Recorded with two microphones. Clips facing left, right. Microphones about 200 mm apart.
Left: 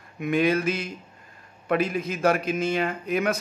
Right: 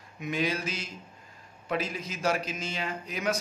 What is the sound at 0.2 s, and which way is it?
A man's voice, 55° left (ahead or behind).